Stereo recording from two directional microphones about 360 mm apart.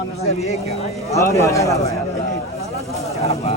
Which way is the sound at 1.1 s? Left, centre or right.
Centre.